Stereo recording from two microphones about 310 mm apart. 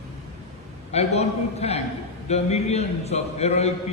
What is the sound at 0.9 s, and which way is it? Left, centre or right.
A man's voice, left.